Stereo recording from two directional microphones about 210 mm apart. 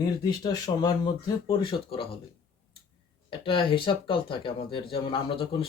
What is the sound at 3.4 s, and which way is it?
Speech, 25° left (ahead or behind).